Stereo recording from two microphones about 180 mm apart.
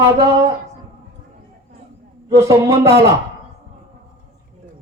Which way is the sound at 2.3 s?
15° right (ahead or behind).